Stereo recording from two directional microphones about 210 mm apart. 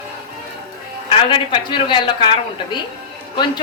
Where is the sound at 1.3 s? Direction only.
25° left (ahead or behind).